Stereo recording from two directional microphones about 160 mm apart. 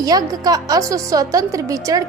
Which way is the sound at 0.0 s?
25° right (ahead or behind).